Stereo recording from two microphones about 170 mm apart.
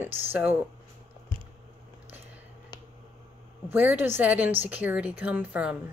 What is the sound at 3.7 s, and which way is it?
Speech, 10° right (ahead or behind).